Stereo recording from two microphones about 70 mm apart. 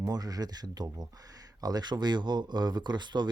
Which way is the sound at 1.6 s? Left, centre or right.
Right.